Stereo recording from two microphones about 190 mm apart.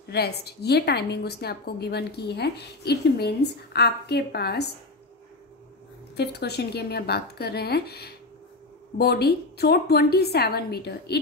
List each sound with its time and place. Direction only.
0.1 s a woman's voice: 55° left (ahead or behind)
6.1 s a woman's voice: 60° left (ahead or behind)